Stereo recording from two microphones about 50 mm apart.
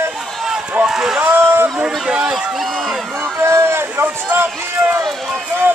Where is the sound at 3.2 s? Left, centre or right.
Right.